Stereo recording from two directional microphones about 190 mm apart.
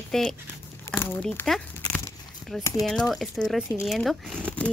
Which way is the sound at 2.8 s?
5° left (ahead or behind).